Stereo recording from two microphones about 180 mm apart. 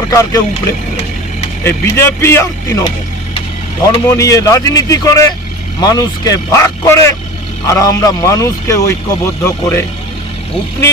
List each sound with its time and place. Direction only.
0.1 s speech: 20° left (ahead or behind)
1.6 s a man's voice: 15° left (ahead or behind)
4.1 s a man's voice: 20° left (ahead or behind)